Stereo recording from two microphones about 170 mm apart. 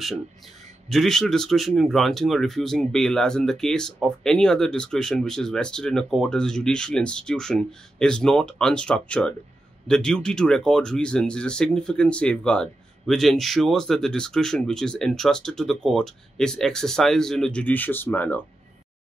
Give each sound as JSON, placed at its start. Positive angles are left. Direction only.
{"t": 0.8, "sound": "speech", "side_deg": 0}